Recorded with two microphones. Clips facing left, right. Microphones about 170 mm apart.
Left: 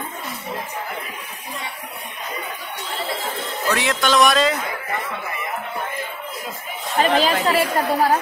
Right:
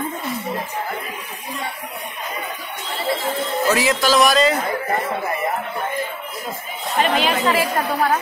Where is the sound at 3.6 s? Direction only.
5° right (ahead or behind).